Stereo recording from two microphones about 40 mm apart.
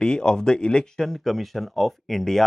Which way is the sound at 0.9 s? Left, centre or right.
Centre.